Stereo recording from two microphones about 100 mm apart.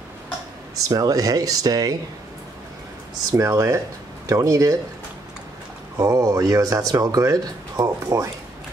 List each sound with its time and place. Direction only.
0.8 s speech: 40° right (ahead or behind)
3.3 s speech: 30° right (ahead or behind)
5.9 s speech: 35° right (ahead or behind)